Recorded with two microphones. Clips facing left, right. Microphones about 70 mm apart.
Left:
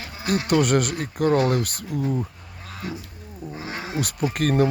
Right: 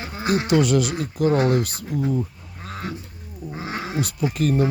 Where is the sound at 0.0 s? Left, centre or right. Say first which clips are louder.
Right 3 dB; right.